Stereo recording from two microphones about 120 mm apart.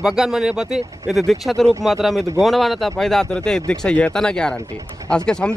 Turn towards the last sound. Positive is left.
turn(degrees=5)  # may be behind; listen again after turning